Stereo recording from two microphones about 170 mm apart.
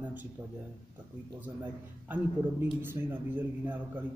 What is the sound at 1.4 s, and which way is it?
A man's voice, 10° right (ahead or behind).